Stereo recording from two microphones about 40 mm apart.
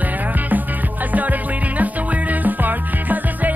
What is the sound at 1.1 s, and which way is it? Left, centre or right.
Music, right.